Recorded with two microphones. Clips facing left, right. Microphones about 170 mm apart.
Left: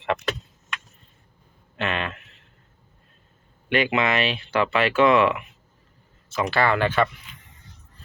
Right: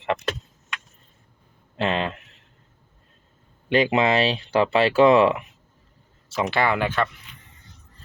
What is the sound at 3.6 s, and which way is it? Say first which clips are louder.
Speech: right 3 dB; 30° right (ahead or behind).